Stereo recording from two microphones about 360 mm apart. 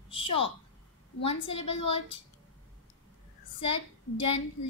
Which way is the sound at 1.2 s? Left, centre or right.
Centre.